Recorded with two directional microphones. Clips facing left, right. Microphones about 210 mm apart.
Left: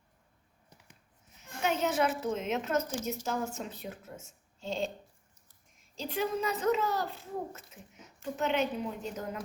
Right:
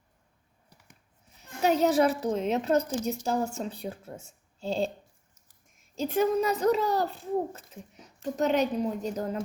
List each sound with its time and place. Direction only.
1.4 s a woman's voice: 35° right (ahead or behind)
6.0 s a woman's voice: 45° right (ahead or behind)